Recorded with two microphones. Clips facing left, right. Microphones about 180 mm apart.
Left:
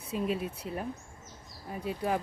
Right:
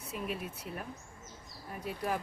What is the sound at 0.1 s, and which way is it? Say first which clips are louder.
Speech: left 7 dB; 25° left (ahead or behind).